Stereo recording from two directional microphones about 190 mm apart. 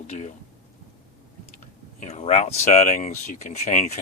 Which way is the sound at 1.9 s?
35° left (ahead or behind).